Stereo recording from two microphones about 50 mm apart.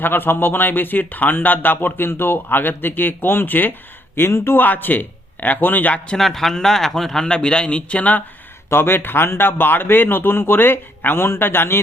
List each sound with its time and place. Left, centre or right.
0.0 s speech: left
4.5 s speech: left
6.1 s speech: centre; by 8.2 s left
8.7 s speech: left